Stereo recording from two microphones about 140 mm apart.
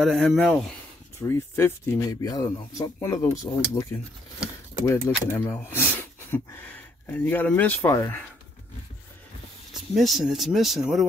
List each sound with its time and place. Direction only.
0.0 s speech: centre (ahead or behind)
1.2 s speech: 15° left (ahead or behind)
2.0 s speech: 25° left (ahead or behind)
5.0 s speech: 20° left (ahead or behind)
9.9 s speech: centre (ahead or behind)